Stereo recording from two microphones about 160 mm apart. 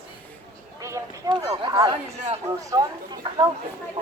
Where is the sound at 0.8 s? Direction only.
20° right (ahead or behind).